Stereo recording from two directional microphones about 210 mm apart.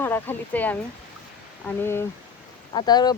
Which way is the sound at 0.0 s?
10° left (ahead or behind).